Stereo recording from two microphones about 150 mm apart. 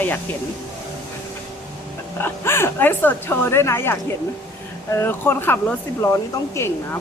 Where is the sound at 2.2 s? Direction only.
15° left (ahead or behind).